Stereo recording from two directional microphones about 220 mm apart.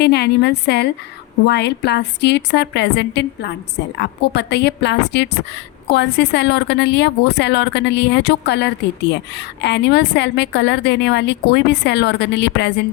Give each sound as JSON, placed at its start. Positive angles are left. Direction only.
{"t": 0.0, "sound": "a woman's voice", "side_deg": 50}